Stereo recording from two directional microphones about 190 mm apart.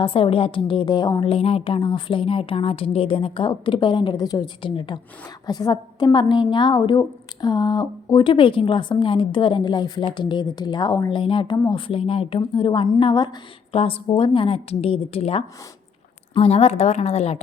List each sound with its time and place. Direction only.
0.0 s a woman's voice: 30° left (ahead or behind)